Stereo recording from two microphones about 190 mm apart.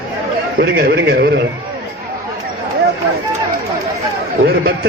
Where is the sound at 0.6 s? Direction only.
55° right (ahead or behind).